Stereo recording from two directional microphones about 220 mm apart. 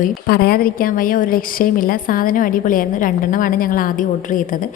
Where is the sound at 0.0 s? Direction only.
45° left (ahead or behind).